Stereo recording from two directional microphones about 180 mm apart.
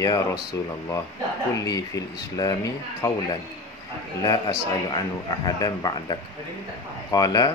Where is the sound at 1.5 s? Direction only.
20° left (ahead or behind).